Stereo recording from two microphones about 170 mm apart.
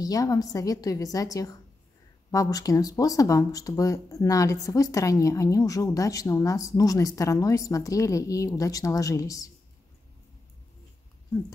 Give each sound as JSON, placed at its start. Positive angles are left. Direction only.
{"t": 0.0, "sound": "speech", "side_deg": 20}